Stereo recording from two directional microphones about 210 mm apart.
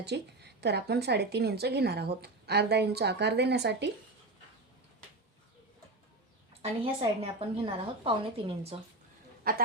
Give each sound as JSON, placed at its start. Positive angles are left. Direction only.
{"t": 0.0, "sound": "speech", "side_deg": -50}
{"t": 6.5, "sound": "a woman's voice", "side_deg": -25}
{"t": 9.5, "sound": "speech", "side_deg": -45}